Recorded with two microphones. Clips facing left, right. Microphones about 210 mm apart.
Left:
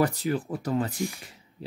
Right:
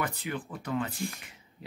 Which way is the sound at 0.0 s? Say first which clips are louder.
Left 9 dB; 35° left (ahead or behind).